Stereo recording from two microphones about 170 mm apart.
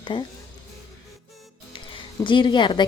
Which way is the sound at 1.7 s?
30° left (ahead or behind).